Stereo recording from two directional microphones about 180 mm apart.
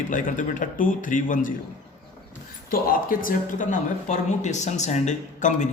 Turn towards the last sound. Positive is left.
turn(degrees=40)  # may be behind; listen again after turning